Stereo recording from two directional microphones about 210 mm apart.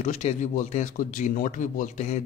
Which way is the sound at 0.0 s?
35° left (ahead or behind).